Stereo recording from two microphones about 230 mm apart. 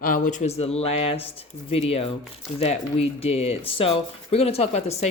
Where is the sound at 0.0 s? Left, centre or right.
Left.